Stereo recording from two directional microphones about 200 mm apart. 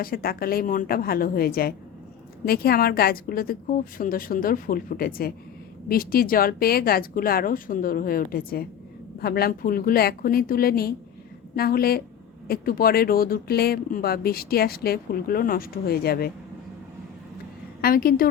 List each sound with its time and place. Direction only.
0.0 s speech: 50° left (ahead or behind)
17.7 s a woman's voice: 50° left (ahead or behind)